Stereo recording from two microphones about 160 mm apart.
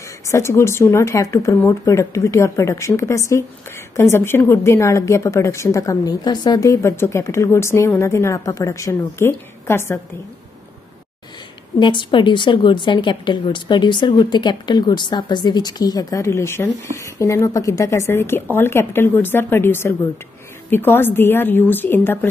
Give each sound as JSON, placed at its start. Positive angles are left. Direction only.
{"t": 0.3, "sound": "speech", "side_deg": 20}
{"t": 11.8, "sound": "a woman's voice", "side_deg": 30}